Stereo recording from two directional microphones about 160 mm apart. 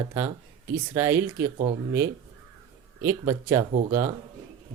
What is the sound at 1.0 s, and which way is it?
Speech, 15° right (ahead or behind).